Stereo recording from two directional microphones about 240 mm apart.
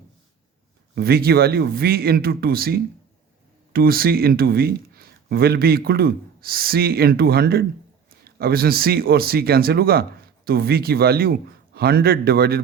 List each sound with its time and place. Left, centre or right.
0.9 s speech: right